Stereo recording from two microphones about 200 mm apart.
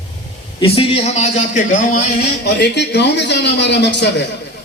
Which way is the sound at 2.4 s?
60° left (ahead or behind).